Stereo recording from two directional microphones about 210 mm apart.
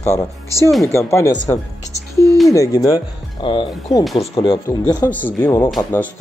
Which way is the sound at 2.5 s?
15° left (ahead or behind).